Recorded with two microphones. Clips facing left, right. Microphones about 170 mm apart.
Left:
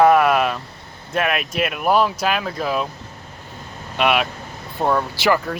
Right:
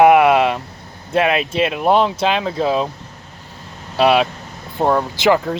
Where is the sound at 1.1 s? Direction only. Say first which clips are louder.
Right 5 dB; 25° right (ahead or behind).